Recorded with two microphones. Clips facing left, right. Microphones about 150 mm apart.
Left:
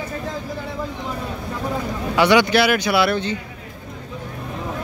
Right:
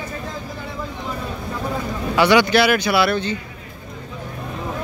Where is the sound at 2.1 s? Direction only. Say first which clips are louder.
Even; 15° left (ahead or behind).